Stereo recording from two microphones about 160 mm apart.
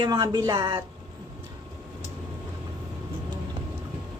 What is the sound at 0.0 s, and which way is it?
Speech, 25° right (ahead or behind).